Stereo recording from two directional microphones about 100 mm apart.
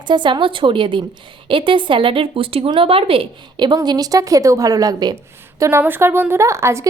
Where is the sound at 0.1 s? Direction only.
50° right (ahead or behind).